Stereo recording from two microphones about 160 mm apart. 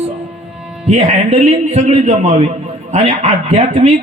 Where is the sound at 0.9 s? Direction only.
45° right (ahead or behind).